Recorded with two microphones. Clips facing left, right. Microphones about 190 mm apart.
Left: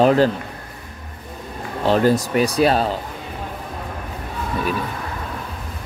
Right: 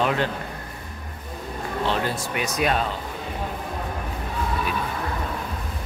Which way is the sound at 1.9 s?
40° left (ahead or behind).